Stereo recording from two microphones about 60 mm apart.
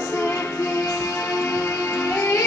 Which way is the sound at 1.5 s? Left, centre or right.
Left.